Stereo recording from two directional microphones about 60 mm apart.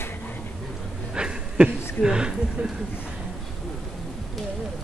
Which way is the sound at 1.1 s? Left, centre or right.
Centre.